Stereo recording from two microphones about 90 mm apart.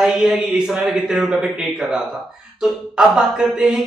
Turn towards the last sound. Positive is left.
turn(degrees=-5)  # may be behind; listen again after turning